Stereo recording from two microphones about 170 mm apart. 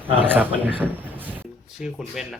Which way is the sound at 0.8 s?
10° right (ahead or behind).